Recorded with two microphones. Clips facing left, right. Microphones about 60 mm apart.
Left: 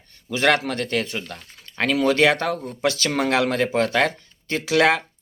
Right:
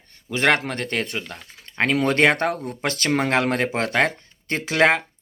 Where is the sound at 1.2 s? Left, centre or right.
Right.